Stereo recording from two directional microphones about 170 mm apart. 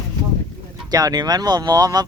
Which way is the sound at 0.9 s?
20° right (ahead or behind).